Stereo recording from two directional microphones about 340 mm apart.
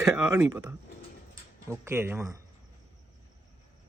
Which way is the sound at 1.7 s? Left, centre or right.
Centre.